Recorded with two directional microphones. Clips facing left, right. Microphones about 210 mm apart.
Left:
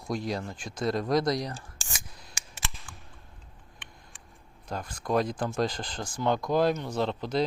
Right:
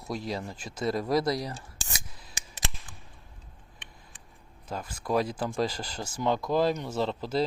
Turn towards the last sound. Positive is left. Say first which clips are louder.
# even
turn(degrees=-5)  # may be behind; listen again after turning